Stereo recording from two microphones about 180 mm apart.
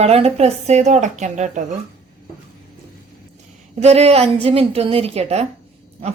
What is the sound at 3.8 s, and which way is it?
A woman's voice, 35° right (ahead or behind).